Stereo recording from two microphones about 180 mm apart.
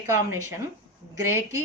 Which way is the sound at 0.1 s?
15° right (ahead or behind).